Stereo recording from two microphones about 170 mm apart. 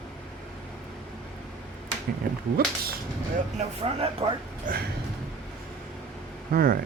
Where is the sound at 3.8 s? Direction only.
35° right (ahead or behind).